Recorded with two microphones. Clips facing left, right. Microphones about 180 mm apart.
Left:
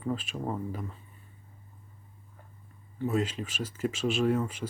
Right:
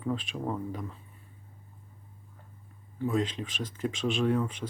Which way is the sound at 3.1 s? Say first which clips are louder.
Even; 5° left (ahead or behind).